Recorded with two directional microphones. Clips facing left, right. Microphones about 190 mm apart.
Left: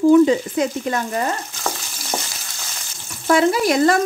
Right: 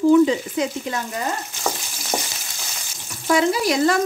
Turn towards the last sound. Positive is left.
turn(degrees=50)  # may be behind; listen again after turning